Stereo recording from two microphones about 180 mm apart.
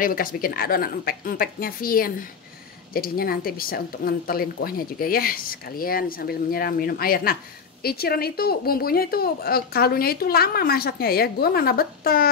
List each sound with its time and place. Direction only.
0.0 s a woman's voice: 50° left (ahead or behind)